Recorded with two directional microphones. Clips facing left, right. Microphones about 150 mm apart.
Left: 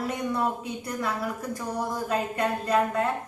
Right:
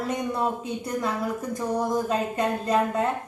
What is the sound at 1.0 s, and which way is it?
A woman's voice, 20° right (ahead or behind).